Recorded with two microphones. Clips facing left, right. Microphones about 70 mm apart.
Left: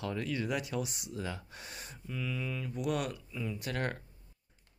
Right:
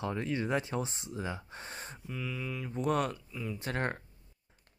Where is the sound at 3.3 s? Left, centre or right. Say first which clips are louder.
Even; centre.